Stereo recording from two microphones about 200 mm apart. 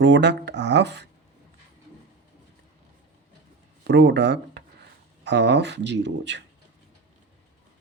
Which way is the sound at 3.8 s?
60° right (ahead or behind).